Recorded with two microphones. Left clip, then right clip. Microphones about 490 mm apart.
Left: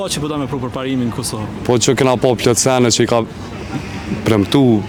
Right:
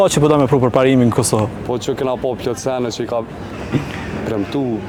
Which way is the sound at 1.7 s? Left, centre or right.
Left.